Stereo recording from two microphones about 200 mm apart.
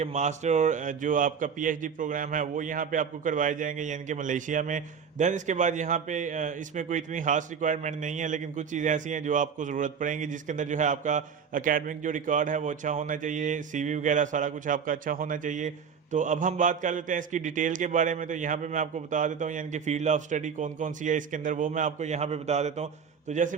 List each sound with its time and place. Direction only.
0.0 s a man's voice: 35° right (ahead or behind)